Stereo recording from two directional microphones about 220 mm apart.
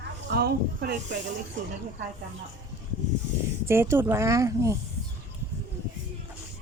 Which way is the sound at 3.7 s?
10° right (ahead or behind).